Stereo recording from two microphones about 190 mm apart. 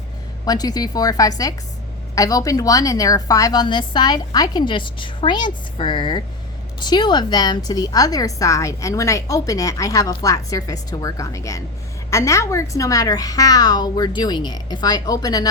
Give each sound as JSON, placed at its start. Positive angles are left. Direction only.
{"t": 0.4, "sound": "a woman's voice", "side_deg": 20}